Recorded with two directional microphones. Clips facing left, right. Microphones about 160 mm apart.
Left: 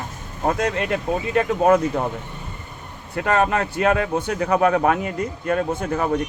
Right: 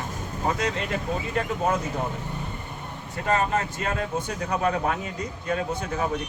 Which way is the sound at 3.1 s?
65° left (ahead or behind).